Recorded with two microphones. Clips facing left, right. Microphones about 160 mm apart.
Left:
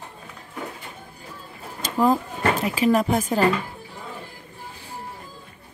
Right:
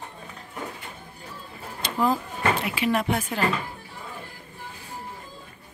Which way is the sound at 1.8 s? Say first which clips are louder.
Left 4 dB; 45° left (ahead or behind).